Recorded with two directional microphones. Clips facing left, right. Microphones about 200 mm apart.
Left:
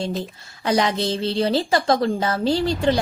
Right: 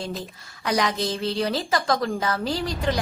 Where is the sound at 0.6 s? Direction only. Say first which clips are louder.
Left 4 dB; 25° left (ahead or behind).